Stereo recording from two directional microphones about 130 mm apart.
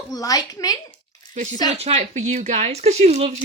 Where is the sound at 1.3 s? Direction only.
70° right (ahead or behind).